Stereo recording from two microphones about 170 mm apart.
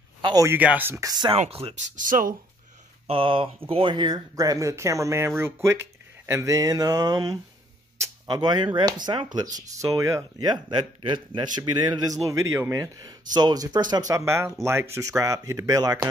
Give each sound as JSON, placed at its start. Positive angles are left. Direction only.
{"t": 0.2, "sound": "a sound", "side_deg": -25}
{"t": 0.5, "sound": "speech", "side_deg": -10}
{"t": 2.0, "sound": "speech", "side_deg": -50}
{"t": 3.1, "sound": "speech", "side_deg": -30}